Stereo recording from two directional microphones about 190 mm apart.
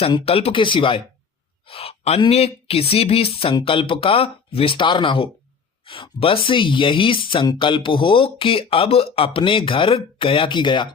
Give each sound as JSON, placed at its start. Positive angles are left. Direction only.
{"t": 0.0, "sound": "speech", "side_deg": 30}